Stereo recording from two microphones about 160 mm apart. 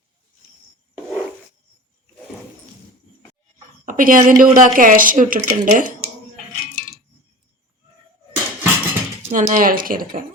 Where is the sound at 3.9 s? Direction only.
60° right (ahead or behind).